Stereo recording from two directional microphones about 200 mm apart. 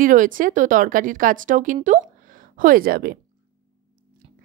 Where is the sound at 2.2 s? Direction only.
45° right (ahead or behind).